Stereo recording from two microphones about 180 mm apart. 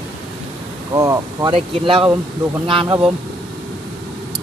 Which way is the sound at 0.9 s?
20° right (ahead or behind).